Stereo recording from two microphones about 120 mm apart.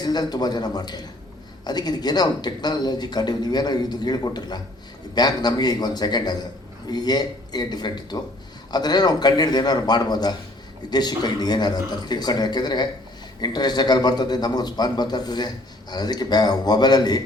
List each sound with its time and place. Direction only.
0.0 s a man's voice: 35° left (ahead or behind)